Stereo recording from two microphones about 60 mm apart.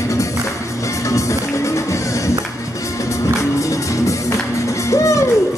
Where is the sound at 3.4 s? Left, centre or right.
Left.